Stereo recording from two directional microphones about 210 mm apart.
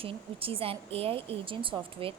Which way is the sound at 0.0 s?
25° right (ahead or behind).